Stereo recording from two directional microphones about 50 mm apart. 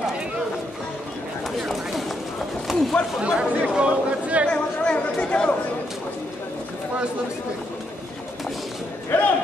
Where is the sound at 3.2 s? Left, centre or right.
Right.